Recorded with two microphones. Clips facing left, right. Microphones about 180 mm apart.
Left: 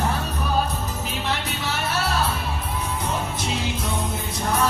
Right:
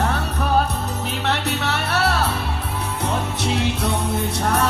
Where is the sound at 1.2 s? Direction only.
70° right (ahead or behind).